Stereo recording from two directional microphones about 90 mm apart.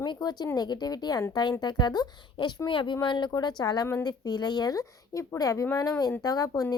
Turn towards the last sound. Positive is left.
turn(degrees=40)  # may be behind; listen again after turning